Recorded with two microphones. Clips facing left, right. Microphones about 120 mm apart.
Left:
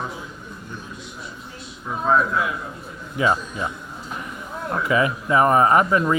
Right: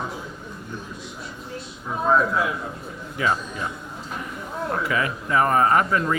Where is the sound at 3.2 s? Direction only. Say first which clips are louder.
Left 3 dB; 20° left (ahead or behind).